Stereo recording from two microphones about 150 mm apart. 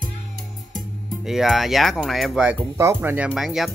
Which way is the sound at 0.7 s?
5° right (ahead or behind).